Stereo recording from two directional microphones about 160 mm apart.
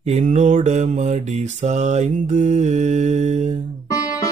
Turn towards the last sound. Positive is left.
turn(degrees=20)  # may be behind; listen again after turning